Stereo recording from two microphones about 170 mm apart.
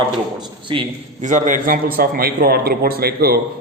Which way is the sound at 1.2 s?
50° right (ahead or behind).